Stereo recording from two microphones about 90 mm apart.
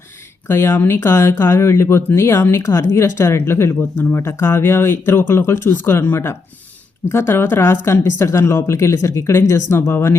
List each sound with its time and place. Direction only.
0.4 s speech: 25° left (ahead or behind)